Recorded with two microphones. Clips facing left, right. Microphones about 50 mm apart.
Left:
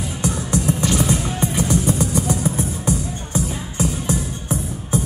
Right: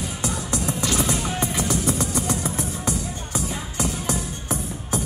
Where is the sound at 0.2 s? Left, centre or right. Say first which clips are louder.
Left 6 dB; left.